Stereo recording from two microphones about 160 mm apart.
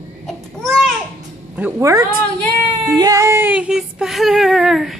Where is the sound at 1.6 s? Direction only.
15° right (ahead or behind).